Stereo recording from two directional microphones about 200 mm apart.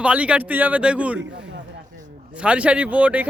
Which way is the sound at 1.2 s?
60° right (ahead or behind).